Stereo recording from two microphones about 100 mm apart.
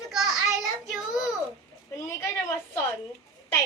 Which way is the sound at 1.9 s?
30° left (ahead or behind).